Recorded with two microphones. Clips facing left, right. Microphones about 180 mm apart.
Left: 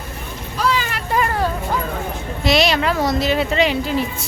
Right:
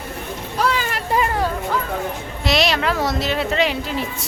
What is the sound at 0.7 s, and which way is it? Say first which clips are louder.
Vehicle: left 1 dB; 45° right (ahead or behind).